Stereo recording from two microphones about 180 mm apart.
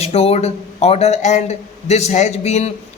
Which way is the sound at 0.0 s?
35° left (ahead or behind).